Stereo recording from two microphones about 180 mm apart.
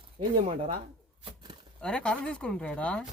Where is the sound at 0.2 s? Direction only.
30° right (ahead or behind).